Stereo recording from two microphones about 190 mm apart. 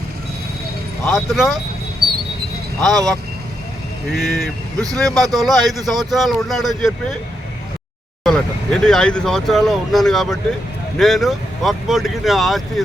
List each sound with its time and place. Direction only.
1.0 s a man's voice: centre (ahead or behind)
2.8 s a man's voice: centre (ahead or behind)
8.2 s a man's voice: 5° left (ahead or behind)